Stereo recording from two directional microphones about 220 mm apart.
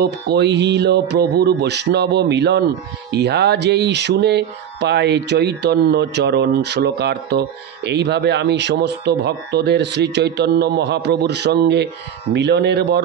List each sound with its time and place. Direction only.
0.0 s speech: 50° right (ahead or behind)